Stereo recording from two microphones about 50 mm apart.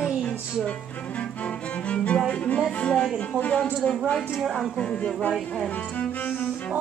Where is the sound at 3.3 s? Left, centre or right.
Left.